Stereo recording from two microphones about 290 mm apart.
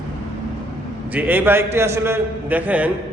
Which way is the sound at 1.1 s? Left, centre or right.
Centre.